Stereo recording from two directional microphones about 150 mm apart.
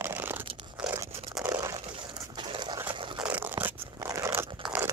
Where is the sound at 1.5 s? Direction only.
20° right (ahead or behind).